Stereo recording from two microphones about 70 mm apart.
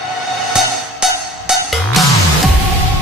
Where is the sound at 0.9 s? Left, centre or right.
Centre.